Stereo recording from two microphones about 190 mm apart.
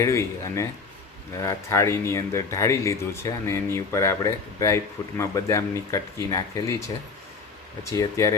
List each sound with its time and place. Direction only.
0.0 s speech: 15° left (ahead or behind)
7.9 s speech: 15° left (ahead or behind)